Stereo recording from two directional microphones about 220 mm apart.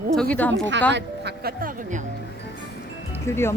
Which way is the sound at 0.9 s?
45° right (ahead or behind).